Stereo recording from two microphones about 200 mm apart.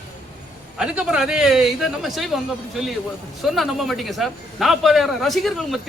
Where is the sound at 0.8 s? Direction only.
5° right (ahead or behind).